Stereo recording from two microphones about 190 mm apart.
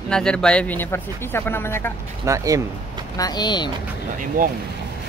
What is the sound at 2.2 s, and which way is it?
Speech, 15° right (ahead or behind).